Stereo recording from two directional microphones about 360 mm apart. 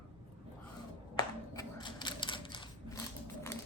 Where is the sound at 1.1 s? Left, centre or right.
Centre.